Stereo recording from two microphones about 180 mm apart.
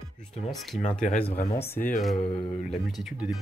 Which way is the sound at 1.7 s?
50° left (ahead or behind).